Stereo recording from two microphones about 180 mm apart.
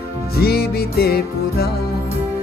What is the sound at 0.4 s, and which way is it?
Music, 60° left (ahead or behind).